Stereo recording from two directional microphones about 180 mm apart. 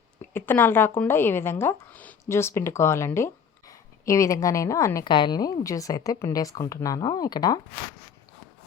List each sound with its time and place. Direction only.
0.2 s speech: 10° left (ahead or behind)